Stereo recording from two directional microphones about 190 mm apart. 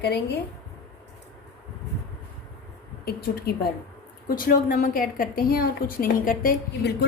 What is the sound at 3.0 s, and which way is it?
A woman's voice, 55° left (ahead or behind).